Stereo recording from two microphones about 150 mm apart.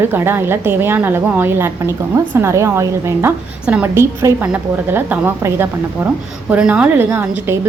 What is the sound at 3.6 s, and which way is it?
A woman's voice, 5° right (ahead or behind).